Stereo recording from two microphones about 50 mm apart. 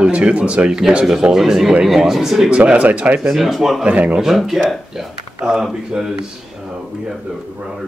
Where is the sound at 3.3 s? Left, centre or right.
Centre.